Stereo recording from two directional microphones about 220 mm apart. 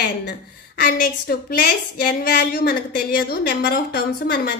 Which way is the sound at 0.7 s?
40° left (ahead or behind).